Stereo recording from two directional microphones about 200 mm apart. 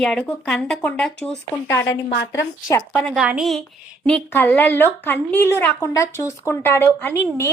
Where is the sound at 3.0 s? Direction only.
Centre (ahead or behind).